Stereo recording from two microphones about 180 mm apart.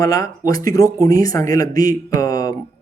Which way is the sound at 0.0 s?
20° left (ahead or behind).